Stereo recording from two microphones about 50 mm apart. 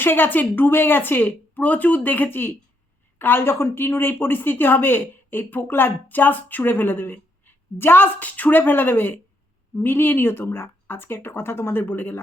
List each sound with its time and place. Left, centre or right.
0.0 s a woman's voice: left